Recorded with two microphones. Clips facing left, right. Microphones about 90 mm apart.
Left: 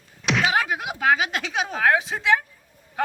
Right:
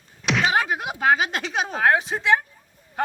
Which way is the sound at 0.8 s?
40° right (ahead or behind).